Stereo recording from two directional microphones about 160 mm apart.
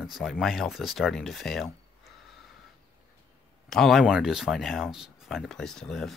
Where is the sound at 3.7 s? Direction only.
Centre (ahead or behind).